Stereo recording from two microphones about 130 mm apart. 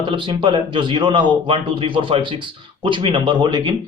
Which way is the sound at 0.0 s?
40° right (ahead or behind).